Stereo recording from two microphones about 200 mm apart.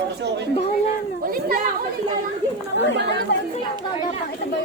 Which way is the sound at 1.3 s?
45° right (ahead or behind).